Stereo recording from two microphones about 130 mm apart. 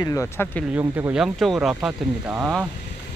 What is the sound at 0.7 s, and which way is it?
Speech, 10° right (ahead or behind).